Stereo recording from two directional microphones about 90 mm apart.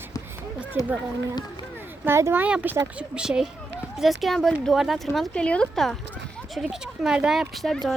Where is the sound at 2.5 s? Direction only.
15° right (ahead or behind).